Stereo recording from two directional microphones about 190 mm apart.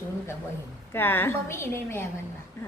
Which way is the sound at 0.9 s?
10° left (ahead or behind).